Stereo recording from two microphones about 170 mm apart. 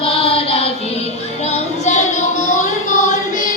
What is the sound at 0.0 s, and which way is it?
Child singing, 35° left (ahead or behind).